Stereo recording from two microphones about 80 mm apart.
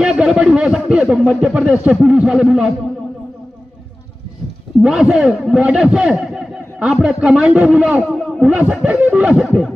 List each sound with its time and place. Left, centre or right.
0.0 s a man's voice: centre
4.8 s a man's voice: centre
9.2 s a man's voice: centre